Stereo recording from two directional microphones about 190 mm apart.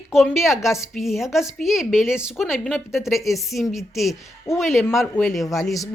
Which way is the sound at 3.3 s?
Centre (ahead or behind).